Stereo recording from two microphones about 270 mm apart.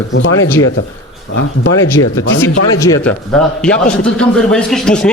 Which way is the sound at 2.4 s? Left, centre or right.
Centre.